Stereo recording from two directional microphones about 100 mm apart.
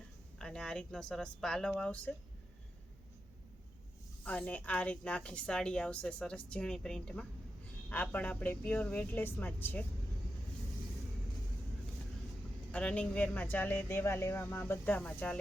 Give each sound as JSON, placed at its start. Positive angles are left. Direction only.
{"t": 0.3, "sound": "speech", "side_deg": 5}
{"t": 4.2, "sound": "speech", "side_deg": 15}
{"t": 12.7, "sound": "speech", "side_deg": 10}